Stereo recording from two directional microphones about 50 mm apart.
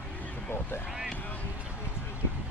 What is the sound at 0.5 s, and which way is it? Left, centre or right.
Boat, left.